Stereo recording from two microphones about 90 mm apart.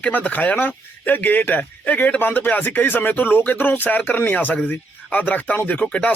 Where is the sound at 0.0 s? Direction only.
20° left (ahead or behind).